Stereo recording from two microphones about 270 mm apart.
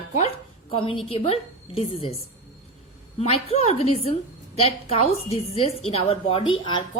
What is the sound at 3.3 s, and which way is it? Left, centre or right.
A woman's voice, left.